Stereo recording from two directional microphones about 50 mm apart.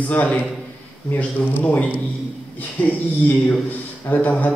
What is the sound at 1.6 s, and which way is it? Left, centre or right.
A man's voice, left.